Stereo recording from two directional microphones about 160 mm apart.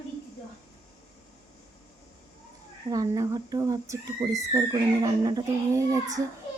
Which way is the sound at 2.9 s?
20° right (ahead or behind).